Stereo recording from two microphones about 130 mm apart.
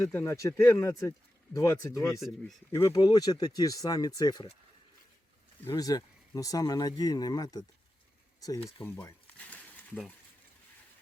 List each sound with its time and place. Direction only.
0.0 s speech: 20° left (ahead or behind)
5.6 s speech: 30° left (ahead or behind)
8.8 s a sound: 15° left (ahead or behind)